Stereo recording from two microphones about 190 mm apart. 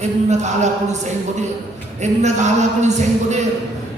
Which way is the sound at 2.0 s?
40° right (ahead or behind).